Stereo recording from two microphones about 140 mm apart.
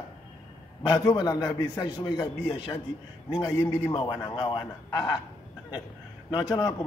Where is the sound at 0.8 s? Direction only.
30° left (ahead or behind).